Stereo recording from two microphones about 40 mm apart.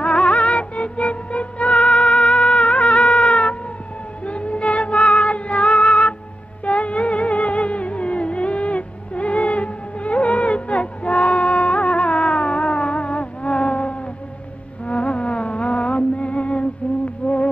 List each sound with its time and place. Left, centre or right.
0.0 s music: left